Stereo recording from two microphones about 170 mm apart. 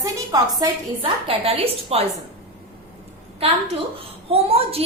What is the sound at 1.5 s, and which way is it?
Speech, 35° right (ahead or behind).